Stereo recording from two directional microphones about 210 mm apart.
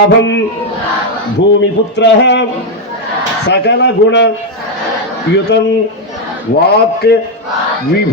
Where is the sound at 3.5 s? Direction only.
55° left (ahead or behind).